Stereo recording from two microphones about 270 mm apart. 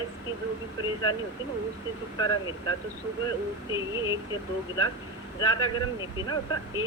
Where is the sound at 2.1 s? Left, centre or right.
Centre.